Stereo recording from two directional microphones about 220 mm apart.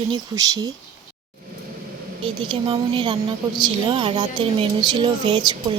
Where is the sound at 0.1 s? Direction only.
15° right (ahead or behind).